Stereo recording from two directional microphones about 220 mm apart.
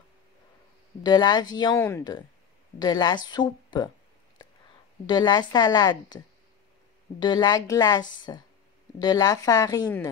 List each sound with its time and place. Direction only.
1.0 s speech: 20° left (ahead or behind)
5.0 s a woman's voice: 20° left (ahead or behind)